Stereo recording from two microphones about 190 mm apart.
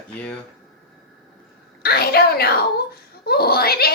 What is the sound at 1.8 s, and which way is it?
A child's voice, 55° left (ahead or behind).